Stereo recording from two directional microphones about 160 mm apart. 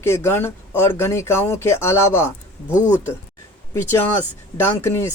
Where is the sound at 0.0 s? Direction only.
15° left (ahead or behind).